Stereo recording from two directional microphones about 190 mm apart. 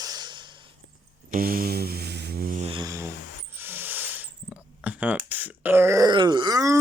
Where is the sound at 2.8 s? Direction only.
15° right (ahead or behind).